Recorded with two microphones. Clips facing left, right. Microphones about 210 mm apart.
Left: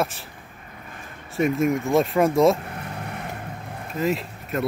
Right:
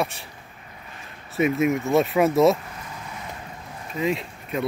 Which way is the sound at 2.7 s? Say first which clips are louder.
Left 4 dB; 60° left (ahead or behind).